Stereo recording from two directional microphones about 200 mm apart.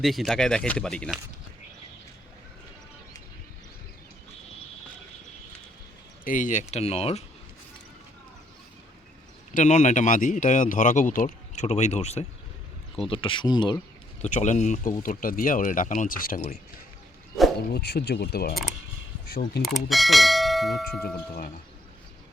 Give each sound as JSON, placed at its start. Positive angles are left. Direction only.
{"t": 0.0, "sound": "speech", "side_deg": 0}
{"t": 6.2, "sound": "speech", "side_deg": 40}
{"t": 9.6, "sound": "speech", "side_deg": 35}
{"t": 14.2, "sound": "speech", "side_deg": 35}
{"t": 17.7, "sound": "speech", "side_deg": 55}
{"t": 19.6, "sound": "bell", "side_deg": 0}